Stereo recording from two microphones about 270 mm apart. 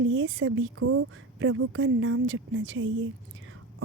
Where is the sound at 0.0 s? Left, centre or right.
Right.